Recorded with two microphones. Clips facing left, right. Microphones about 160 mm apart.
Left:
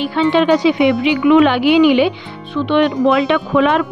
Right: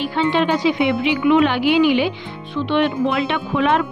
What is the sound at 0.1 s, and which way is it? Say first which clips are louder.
A woman's voice: left 6 dB; 75° left (ahead or behind).